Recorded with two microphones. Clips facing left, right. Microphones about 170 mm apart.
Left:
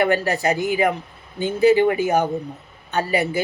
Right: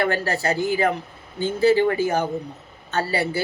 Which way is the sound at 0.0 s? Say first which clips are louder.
Left 3 dB; 15° left (ahead or behind).